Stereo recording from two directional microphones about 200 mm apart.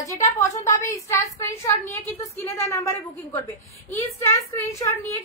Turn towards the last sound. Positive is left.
turn(degrees=15)  # may be behind; listen again after turning